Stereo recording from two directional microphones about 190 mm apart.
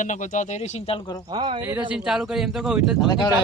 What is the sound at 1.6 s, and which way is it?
Speech, 10° right (ahead or behind).